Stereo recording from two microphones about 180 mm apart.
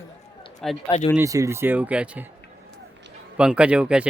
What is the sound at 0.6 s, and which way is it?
Speech, centre (ahead or behind).